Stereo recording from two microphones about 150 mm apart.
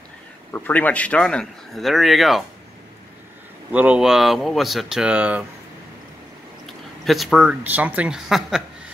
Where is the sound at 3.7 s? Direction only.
10° right (ahead or behind).